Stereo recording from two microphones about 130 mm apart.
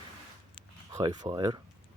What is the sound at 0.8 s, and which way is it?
Speech, 35° right (ahead or behind).